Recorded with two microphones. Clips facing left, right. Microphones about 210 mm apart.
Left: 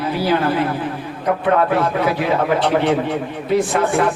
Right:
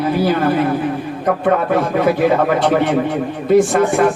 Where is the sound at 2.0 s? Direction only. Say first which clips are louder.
Right 4 dB; 55° right (ahead or behind).